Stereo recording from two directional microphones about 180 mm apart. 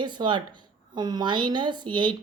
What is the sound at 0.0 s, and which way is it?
A woman's voice, 25° right (ahead or behind).